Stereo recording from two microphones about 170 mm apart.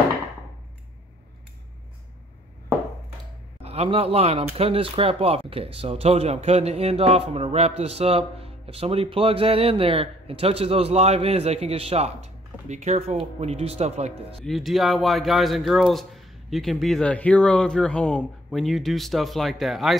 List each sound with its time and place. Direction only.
3.6 s speech: 35° right (ahead or behind)
14.4 s speech: centre (ahead or behind)